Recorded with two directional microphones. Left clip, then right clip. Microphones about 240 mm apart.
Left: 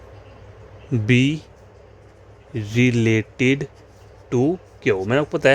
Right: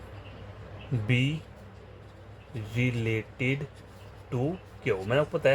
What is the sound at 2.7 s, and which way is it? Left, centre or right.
A man's voice, left.